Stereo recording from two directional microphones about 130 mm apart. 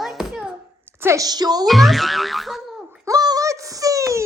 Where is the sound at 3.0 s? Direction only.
30° right (ahead or behind).